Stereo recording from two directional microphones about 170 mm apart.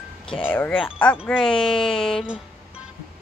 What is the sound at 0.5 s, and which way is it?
Speech, 10° left (ahead or behind).